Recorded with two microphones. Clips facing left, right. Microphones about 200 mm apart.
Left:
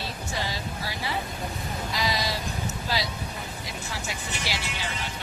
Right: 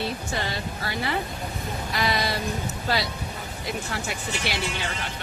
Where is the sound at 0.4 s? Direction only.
60° right (ahead or behind).